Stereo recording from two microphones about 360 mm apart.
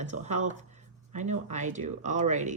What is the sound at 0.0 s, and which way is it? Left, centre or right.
Speech, centre.